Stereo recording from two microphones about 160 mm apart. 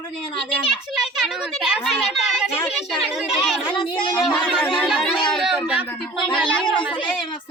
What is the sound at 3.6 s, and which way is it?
Speech, 30° left (ahead or behind).